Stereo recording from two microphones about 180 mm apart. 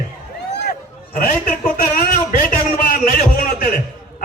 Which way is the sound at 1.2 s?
45° left (ahead or behind).